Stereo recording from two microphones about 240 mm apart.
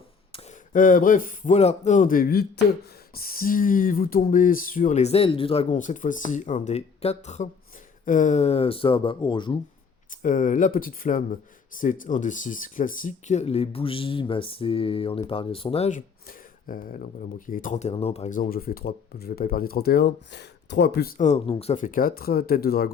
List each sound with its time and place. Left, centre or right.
0.3 s speech: left
10.1 s speech: left